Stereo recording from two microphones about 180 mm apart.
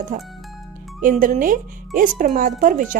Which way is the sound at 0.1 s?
45° right (ahead or behind).